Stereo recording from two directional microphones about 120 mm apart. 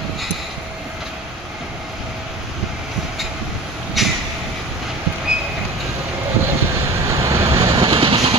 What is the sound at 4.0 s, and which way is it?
Vehicle, centre (ahead or behind).